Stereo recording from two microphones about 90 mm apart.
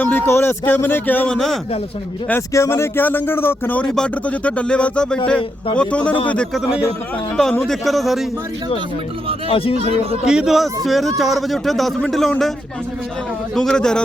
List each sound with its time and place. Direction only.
0.0 s a man's voice: 20° left (ahead or behind)
2.5 s a man's voice: 30° left (ahead or behind)
3.8 s a man's voice: 10° left (ahead or behind)
7.6 s speech: centre (ahead or behind)
9.5 s speech: 90° left
9.7 s speech: 90° right
10.2 s speech: 5° right (ahead or behind)
13.6 s a man's voice: 5° left (ahead or behind)